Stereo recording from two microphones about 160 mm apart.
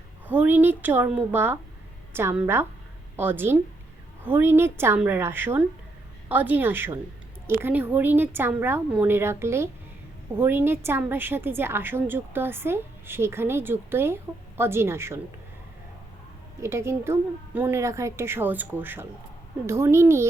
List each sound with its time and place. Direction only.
0.3 s a woman's voice: 10° right (ahead or behind)
16.6 s a woman's voice: 15° right (ahead or behind)